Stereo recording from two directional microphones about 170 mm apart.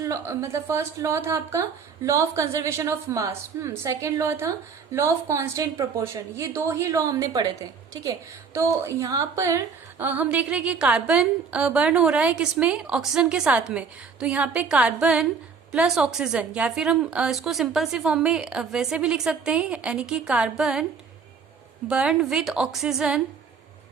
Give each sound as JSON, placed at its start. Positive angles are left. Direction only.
{"t": 0.0, "sound": "a woman's voice", "side_deg": -20}
{"t": 8.5, "sound": "a woman's voice", "side_deg": -15}
{"t": 21.8, "sound": "a woman's voice", "side_deg": -5}